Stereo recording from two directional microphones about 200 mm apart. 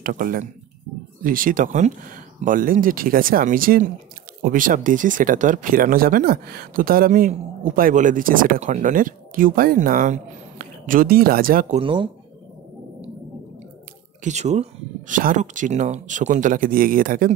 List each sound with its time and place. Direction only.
0.0 s speech: 45° right (ahead or behind)
11.8 s speech: 25° right (ahead or behind)
14.2 s speech: 35° right (ahead or behind)